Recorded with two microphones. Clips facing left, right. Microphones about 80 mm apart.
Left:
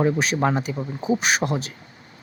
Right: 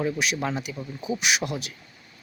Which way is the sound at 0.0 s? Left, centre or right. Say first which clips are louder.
Left 6 dB; left.